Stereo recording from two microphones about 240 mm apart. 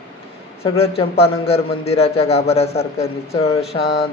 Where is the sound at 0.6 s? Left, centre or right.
Left.